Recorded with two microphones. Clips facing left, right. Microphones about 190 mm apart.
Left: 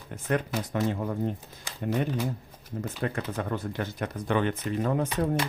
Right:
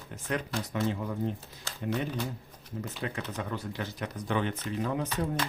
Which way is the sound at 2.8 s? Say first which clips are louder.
Left 4 dB; 50° left (ahead or behind).